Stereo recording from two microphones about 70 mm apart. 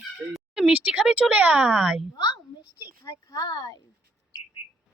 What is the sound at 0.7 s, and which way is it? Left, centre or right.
Speech, centre.